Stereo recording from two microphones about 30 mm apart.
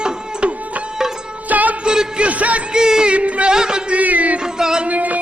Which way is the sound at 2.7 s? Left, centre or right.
Right.